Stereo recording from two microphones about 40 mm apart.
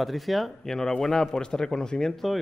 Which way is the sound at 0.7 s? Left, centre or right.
Centre.